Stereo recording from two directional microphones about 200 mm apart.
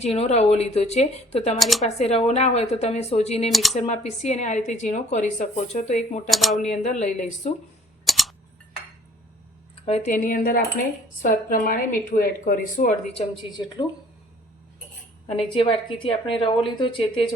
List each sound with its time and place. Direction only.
0.0 s speech: 30° left (ahead or behind)
1.5 s speech: centre (ahead or behind)
1.8 s speech: 30° left (ahead or behind)
3.5 s speech: centre (ahead or behind)
3.8 s speech: 35° left (ahead or behind)
6.3 s speech: centre (ahead or behind)
6.6 s speech: 35° left (ahead or behind)
8.0 s camera: centre (ahead or behind)
9.8 s a woman's voice: 35° left (ahead or behind)
15.3 s a woman's voice: 30° left (ahead or behind)